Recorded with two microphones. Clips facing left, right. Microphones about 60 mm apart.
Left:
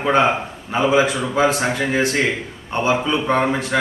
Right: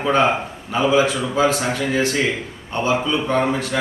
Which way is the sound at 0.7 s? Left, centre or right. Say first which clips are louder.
Even; left.